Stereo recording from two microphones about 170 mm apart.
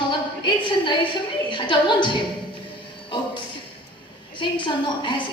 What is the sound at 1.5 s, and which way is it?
Speech, 30° left (ahead or behind).